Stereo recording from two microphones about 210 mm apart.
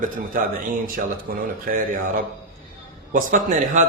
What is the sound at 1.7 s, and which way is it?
Speech, 45° right (ahead or behind).